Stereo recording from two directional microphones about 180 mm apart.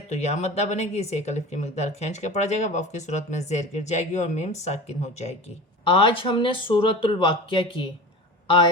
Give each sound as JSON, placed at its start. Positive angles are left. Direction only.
{"t": 0.1, "sound": "speech", "side_deg": 40}